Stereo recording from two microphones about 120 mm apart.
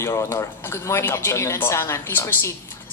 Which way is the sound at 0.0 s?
20° left (ahead or behind).